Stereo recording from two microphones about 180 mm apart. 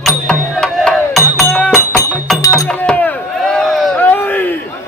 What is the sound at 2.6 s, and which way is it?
Chop, 5° left (ahead or behind).